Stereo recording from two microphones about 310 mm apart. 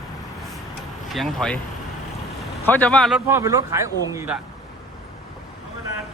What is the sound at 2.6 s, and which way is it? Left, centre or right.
Speech, centre.